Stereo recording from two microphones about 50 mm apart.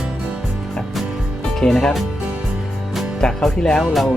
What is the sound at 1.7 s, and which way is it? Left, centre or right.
Speech, centre.